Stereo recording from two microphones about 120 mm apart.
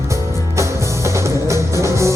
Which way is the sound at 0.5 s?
25° right (ahead or behind).